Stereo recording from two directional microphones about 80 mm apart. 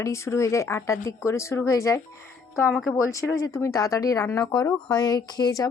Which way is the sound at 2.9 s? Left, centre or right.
Left.